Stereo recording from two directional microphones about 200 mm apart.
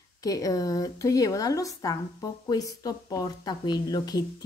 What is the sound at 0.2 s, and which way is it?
A woman's voice, 15° left (ahead or behind).